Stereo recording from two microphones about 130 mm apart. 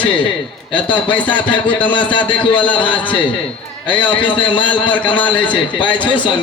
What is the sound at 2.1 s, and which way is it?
Speech, 40° left (ahead or behind).